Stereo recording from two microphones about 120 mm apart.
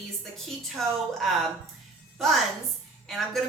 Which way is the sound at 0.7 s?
Centre (ahead or behind).